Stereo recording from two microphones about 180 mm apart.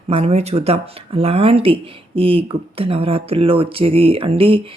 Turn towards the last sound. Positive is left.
turn(degrees=-30)  # may be behind; listen again after turning